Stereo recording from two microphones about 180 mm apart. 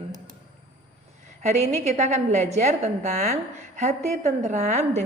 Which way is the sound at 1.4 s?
40° right (ahead or behind).